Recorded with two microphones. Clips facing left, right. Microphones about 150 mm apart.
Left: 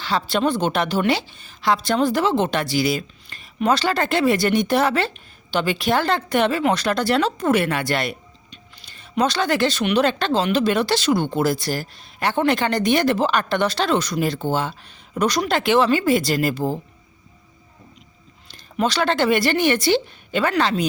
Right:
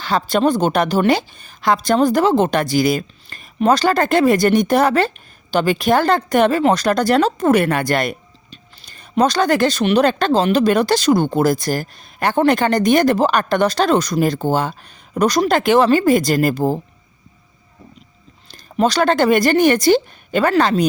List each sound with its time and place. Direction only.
0.0 s a woman's voice: 45° right (ahead or behind)
18.5 s a woman's voice: 40° right (ahead or behind)